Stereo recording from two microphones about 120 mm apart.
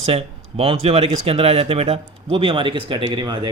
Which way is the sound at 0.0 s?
60° right (ahead or behind).